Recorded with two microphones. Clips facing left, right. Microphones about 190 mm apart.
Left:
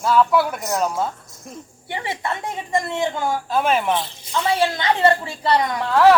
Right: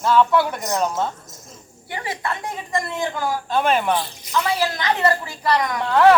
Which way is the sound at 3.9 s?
25° left (ahead or behind).